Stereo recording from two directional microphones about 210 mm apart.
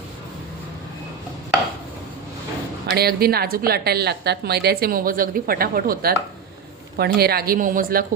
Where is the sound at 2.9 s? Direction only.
50° right (ahead or behind).